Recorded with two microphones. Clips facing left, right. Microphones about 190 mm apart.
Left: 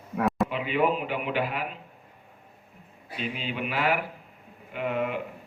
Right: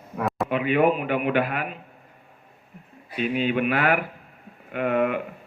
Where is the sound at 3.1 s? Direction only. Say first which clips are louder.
Right 9 dB; 55° right (ahead or behind).